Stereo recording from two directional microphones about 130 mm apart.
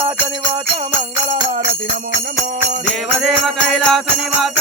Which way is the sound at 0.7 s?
65° right (ahead or behind).